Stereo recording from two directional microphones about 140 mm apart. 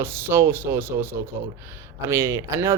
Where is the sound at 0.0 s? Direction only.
15° right (ahead or behind).